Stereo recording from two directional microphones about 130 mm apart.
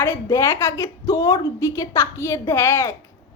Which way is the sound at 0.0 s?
20° left (ahead or behind).